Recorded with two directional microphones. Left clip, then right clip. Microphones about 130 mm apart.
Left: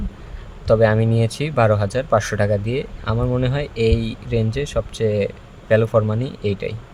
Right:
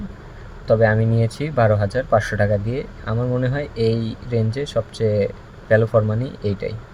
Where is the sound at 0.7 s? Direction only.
30° left (ahead or behind); by 6.7 s 10° left (ahead or behind).